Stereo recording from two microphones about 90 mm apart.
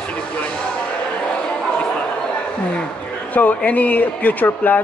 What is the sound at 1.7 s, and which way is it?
Chatter, 10° left (ahead or behind).